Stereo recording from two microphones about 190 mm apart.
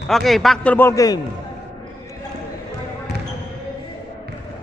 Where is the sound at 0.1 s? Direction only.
Centre (ahead or behind); by 1.2 s 20° left (ahead or behind).